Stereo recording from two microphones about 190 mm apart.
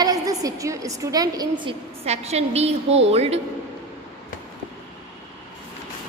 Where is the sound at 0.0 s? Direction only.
20° right (ahead or behind).